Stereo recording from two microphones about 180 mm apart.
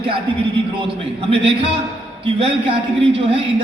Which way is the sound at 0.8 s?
30° right (ahead or behind).